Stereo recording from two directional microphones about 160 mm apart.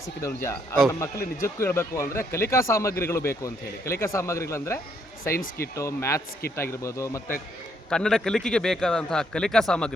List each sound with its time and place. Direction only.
0.2 s speech: 15° left (ahead or behind)
7.9 s speech: 5° left (ahead or behind)